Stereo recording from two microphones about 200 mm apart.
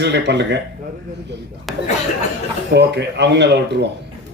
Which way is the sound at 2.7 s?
60° right (ahead or behind).